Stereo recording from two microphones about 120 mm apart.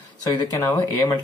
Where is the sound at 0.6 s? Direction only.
20° left (ahead or behind).